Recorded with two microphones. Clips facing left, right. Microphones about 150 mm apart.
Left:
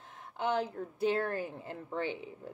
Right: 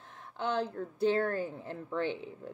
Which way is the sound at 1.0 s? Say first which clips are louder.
Right 2 dB; 10° left (ahead or behind).